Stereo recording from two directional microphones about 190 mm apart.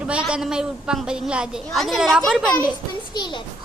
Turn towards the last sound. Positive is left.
turn(degrees=25)  # may be behind; listen again after turning